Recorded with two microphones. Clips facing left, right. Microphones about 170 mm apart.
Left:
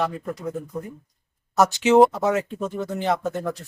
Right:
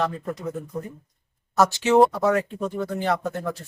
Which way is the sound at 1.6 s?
20° left (ahead or behind).